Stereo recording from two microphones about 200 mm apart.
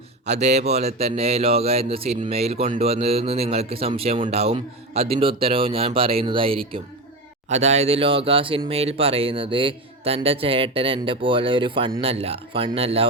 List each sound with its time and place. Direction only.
0.3 s speech: 35° right (ahead or behind)